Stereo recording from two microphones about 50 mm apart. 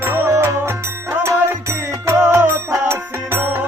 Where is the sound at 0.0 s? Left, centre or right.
Right.